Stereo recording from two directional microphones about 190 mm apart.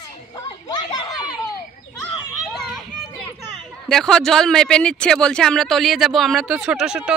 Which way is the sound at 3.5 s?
Centre (ahead or behind).